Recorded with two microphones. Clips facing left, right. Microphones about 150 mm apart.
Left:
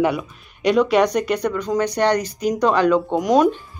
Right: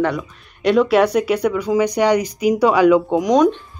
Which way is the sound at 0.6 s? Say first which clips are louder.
Right 2 dB; centre (ahead or behind).